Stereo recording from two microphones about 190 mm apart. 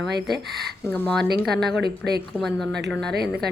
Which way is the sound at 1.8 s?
55° right (ahead or behind).